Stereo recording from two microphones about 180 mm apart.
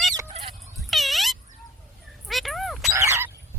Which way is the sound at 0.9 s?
Centre (ahead or behind).